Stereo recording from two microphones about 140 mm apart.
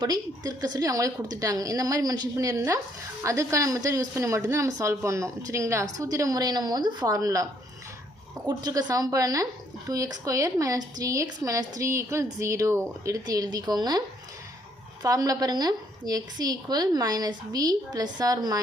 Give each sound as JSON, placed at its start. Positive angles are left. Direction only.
{"t": 0.0, "sound": "a woman's voice", "side_deg": -30}
{"t": 8.4, "sound": "a woman's voice", "side_deg": -30}
{"t": 15.0, "sound": "a woman's voice", "side_deg": -25}